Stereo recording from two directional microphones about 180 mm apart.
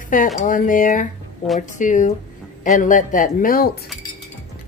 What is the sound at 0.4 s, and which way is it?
Speech, 50° left (ahead or behind).